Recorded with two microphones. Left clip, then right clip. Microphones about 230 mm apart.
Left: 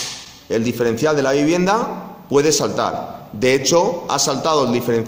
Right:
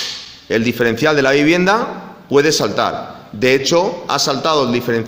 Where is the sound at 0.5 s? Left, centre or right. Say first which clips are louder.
Right 3 dB; right.